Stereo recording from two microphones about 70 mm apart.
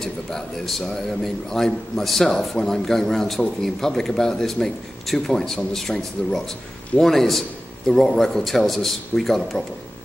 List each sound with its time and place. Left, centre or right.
0.0 s a man's voice: centre